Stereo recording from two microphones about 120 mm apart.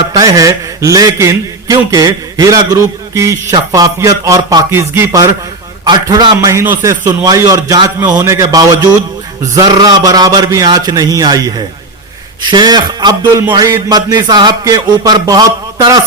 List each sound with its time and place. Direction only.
0.0 s mantra: 30° right (ahead or behind)
3.5 s speech: 30° right (ahead or behind)
5.8 s mantra: 35° right (ahead or behind)
7.3 s speech: 25° right (ahead or behind)
9.6 s mantra: 30° right (ahead or behind)